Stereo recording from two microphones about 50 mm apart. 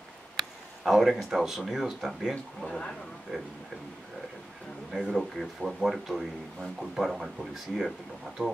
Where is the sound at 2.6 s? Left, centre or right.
Centre.